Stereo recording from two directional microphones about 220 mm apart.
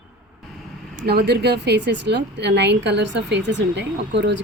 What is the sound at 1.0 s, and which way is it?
Speech, 50° right (ahead or behind).